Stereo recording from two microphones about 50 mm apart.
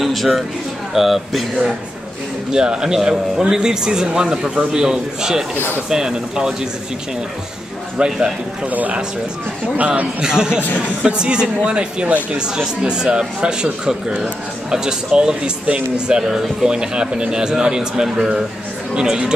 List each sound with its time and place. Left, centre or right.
0.0 s a sound: centre
0.9 s speech: centre
2.5 s speech: centre
8.0 s speech: centre
8.6 s a man's voice: right
10.2 s speech: centre
12.5 s speech: centre